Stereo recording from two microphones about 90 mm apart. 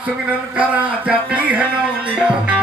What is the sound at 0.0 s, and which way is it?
Speech, 15° right (ahead or behind).